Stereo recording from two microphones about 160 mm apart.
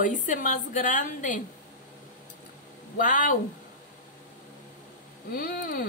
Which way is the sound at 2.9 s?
55° left (ahead or behind).